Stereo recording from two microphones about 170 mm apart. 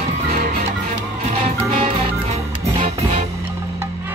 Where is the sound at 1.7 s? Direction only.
35° right (ahead or behind).